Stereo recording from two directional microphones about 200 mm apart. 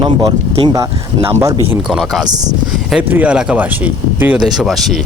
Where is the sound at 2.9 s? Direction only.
10° right (ahead or behind).